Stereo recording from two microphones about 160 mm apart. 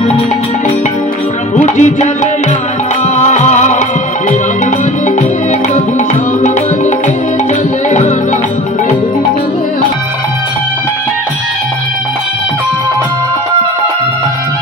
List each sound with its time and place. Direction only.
1.5 s music: 45° left (ahead or behind)
3.2 s music: 45° left (ahead or behind)